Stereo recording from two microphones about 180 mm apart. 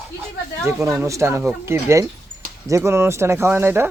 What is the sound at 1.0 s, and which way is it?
Speech, 15° right (ahead or behind).